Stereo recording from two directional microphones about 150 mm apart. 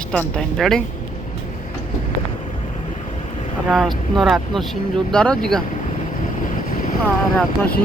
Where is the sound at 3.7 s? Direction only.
Centre (ahead or behind).